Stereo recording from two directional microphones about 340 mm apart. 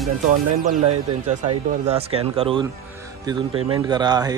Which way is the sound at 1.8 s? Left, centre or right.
Centre.